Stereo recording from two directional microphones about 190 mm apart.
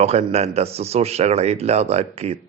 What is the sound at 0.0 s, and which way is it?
Speech, 35° right (ahead or behind).